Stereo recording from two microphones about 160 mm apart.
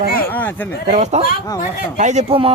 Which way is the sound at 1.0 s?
45° right (ahead or behind).